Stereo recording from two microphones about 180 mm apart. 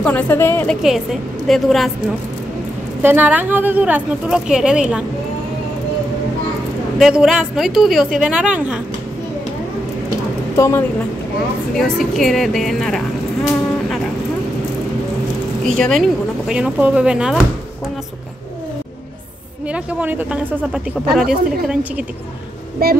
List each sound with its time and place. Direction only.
0.0 s a woman's voice: 10° left (ahead or behind)
1.5 s a woman's voice: centre (ahead or behind)
3.0 s speech: 10° right (ahead or behind)
7.0 s a woman's voice: 5° right (ahead or behind)
10.5 s speech: 15° left (ahead or behind)
11.7 s a woman's voice: centre (ahead or behind)
15.6 s a woman's voice: centre (ahead or behind)
19.7 s speech: 10° right (ahead or behind)
22.8 s speech: 55° right (ahead or behind)